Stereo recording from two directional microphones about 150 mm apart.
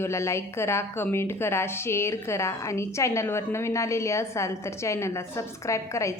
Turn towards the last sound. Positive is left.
turn(degrees=20)  # may be behind; listen again after turning